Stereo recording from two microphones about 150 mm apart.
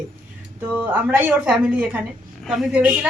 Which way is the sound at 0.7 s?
10° right (ahead or behind).